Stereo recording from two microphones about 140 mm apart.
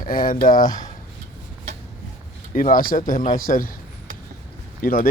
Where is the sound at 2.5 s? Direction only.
75° left (ahead or behind).